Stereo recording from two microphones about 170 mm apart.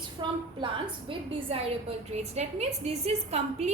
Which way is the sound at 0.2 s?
30° right (ahead or behind).